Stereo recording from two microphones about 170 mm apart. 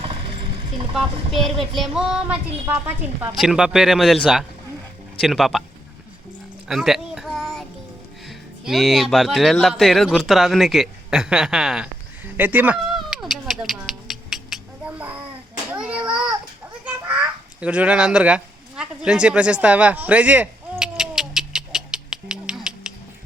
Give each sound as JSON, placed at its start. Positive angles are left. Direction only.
{"t": 0.0, "sound": "vehicle", "side_deg": -35}
{"t": 1.7, "sound": "speech", "side_deg": 0}
{"t": 6.7, "sound": "a sound", "side_deg": 0}
{"t": 8.6, "sound": "speech", "side_deg": 0}
{"t": 12.4, "sound": "a sound", "side_deg": -10}
{"t": 15.8, "sound": "child singing", "side_deg": -5}
{"t": 16.8, "sound": "duck", "side_deg": -10}